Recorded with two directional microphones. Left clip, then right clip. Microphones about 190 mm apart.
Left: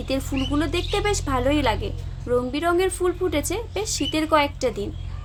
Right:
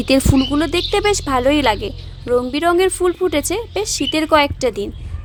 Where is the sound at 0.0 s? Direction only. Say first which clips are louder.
Right 11 dB; 50° right (ahead or behind).